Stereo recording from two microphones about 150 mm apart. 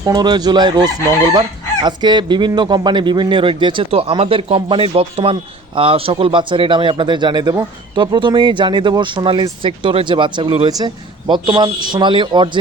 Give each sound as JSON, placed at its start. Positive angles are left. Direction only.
{"t": 0.0, "sound": "chicken", "side_deg": -25}
{"t": 2.6, "sound": "speech", "side_deg": -30}